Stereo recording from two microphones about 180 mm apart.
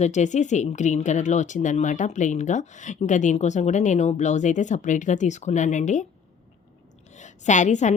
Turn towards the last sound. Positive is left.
turn(degrees=40)  # may be behind; listen again after turning